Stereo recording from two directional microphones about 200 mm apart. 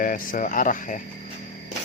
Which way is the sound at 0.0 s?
45° left (ahead or behind).